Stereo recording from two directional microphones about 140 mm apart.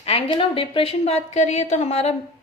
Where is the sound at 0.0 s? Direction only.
40° left (ahead or behind).